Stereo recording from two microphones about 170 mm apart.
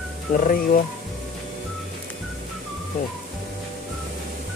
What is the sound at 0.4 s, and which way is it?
Speech, 55° left (ahead or behind).